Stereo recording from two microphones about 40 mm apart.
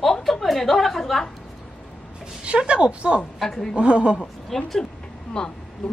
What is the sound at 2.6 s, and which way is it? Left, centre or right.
Speech, right.